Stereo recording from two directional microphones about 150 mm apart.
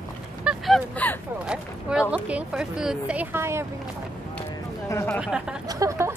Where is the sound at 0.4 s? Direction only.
5° right (ahead or behind).